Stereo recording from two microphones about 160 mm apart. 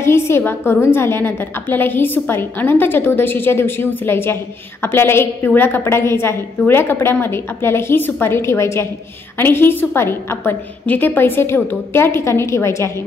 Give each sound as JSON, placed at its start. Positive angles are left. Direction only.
{"t": 0.0, "sound": "a woman's voice", "side_deg": 15}